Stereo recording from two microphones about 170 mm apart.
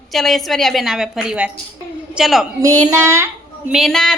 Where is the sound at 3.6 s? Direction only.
Centre (ahead or behind).